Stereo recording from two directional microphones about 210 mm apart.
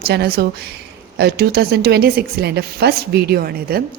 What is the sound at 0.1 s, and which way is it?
Speech, 50° right (ahead or behind).